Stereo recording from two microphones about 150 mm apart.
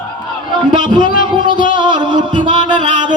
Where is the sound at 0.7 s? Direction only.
30° right (ahead or behind).